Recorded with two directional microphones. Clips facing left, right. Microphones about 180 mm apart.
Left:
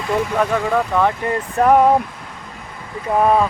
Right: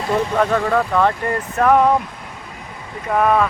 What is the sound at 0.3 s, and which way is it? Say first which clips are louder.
Speech: right 1 dB; 10° left (ahead or behind).